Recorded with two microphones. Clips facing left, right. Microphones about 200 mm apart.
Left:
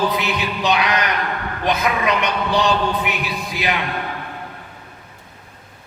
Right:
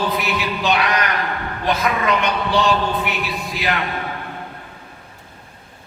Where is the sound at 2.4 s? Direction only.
20° left (ahead or behind).